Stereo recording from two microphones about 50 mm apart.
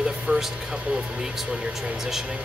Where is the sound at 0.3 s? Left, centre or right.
Right.